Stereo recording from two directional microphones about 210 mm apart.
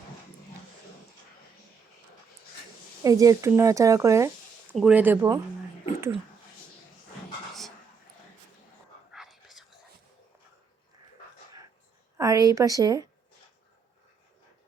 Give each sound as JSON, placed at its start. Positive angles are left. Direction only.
{"t": 3.0, "sound": "speech", "side_deg": -15}
{"t": 4.7, "sound": "speech", "side_deg": -5}
{"t": 9.1, "sound": "whispering", "side_deg": 0}
{"t": 12.1, "sound": "a woman's voice", "side_deg": -15}